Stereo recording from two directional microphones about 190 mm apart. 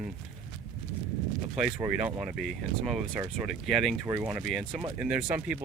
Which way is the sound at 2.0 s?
5° right (ahead or behind).